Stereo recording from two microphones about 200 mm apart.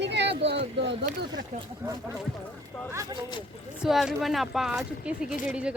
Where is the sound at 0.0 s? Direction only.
60° right (ahead or behind).